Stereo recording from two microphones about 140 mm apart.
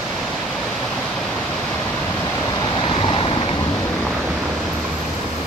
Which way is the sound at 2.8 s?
40° left (ahead or behind).